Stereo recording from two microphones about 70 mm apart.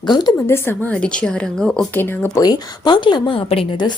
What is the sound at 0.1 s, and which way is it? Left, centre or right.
Speech, left.